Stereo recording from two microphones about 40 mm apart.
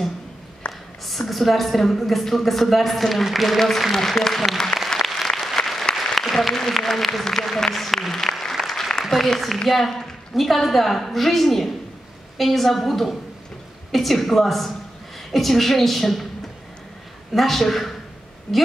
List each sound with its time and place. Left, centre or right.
1.0 s a woman's voice: centre
4.8 s applause: centre
6.1 s a woman's voice: centre
8.4 s applause: centre
9.1 s a woman's voice: centre
17.3 s a woman's voice: centre